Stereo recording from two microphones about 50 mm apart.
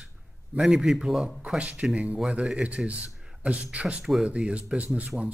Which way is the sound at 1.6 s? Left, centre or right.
Right.